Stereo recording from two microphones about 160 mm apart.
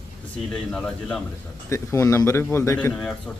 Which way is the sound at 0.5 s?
5° left (ahead or behind).